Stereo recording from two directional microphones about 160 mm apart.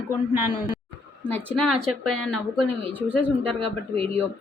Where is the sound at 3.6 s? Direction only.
35° right (ahead or behind).